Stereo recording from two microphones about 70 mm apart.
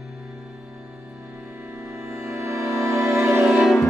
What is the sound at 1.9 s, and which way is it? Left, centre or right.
Music, right.